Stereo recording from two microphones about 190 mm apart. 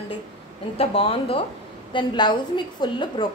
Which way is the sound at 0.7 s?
30° left (ahead or behind).